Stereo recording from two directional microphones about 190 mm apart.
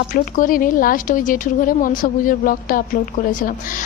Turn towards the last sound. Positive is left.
turn(degrees=45)  # may be behind; listen again after turning